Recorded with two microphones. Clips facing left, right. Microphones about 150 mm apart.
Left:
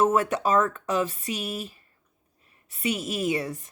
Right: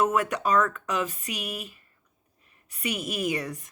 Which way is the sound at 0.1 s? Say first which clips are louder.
Left 2 dB; 30° left (ahead or behind).